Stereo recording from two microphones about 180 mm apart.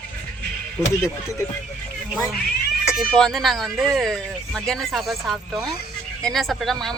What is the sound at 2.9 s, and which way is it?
Speech, 5° left (ahead or behind).